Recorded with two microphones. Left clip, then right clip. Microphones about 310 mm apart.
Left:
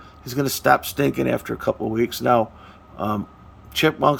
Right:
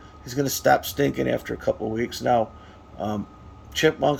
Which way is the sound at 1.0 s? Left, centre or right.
Left.